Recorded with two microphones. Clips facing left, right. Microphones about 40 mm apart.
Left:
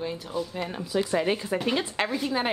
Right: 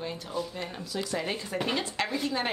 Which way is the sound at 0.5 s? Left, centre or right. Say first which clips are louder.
Left 6 dB; centre.